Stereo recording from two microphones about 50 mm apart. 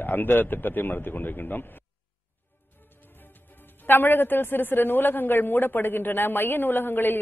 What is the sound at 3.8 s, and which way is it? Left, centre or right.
A man's voice, left.